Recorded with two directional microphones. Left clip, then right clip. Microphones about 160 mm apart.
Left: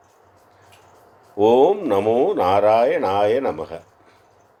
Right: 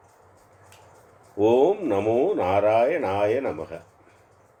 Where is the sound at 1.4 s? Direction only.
30° left (ahead or behind).